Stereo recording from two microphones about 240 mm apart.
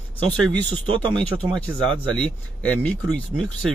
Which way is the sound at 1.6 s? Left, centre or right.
Centre.